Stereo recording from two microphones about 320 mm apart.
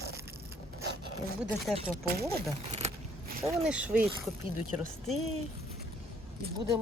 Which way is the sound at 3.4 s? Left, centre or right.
Centre.